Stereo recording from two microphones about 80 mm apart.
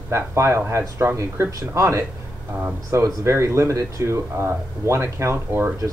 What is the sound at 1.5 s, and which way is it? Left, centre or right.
Speech, right.